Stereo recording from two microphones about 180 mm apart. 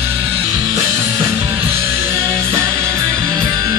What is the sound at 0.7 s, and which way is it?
Music, 20° right (ahead or behind).